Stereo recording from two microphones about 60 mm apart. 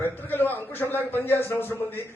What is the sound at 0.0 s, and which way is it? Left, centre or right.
A man's voice, left.